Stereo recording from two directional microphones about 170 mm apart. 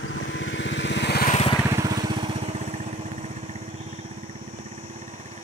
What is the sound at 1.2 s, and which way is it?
Vehicle, 40° left (ahead or behind).